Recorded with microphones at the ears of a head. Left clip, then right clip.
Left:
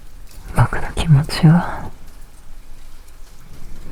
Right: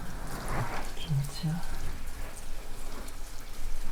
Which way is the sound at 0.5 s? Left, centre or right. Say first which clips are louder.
Left 17 dB; left.